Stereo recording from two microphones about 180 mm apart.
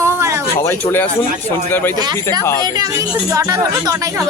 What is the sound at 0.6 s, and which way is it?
Speech, 15° left (ahead or behind).